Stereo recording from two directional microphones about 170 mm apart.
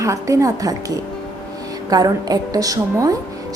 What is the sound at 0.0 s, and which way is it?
Speech, 20° right (ahead or behind).